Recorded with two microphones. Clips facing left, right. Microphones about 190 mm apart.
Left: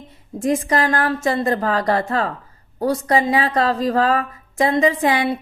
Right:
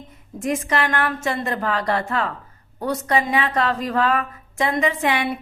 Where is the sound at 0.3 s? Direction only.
30° left (ahead or behind).